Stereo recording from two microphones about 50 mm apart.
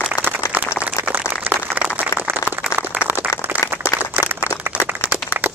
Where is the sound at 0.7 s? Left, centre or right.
Right.